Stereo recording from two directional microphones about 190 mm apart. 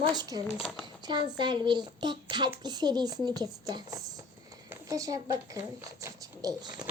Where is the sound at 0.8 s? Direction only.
20° right (ahead or behind).